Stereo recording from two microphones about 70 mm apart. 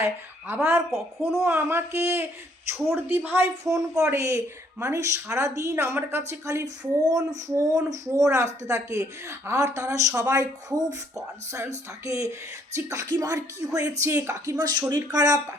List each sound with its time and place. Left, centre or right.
0.0 s speech: right
2.7 s speech: centre
3.1 s speech: right
5.7 s speech: right
10.7 s speech: right
13.1 s speech: right
14.6 s speech: right